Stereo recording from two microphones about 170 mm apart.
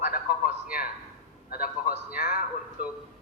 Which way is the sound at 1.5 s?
60° left (ahead or behind).